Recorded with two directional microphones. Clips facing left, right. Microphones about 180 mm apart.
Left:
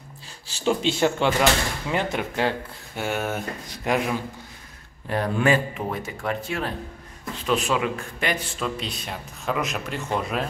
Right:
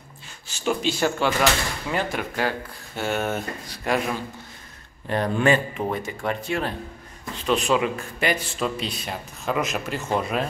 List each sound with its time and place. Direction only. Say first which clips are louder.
0.5 s speech: left 2 dB; 30° left (ahead or behind)
3.0 s a man's voice: right 1 dB; 10° left (ahead or behind)
3.6 s a man's voice: left 1 dB; 20° left (ahead or behind)
5.0 s a man's voice: right 1 dB; 5° left (ahead or behind)